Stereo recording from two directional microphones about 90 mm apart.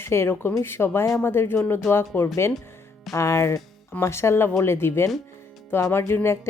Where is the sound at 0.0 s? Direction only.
25° left (ahead or behind).